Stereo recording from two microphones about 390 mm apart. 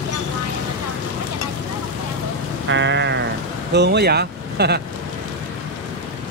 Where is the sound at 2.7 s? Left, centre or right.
Right.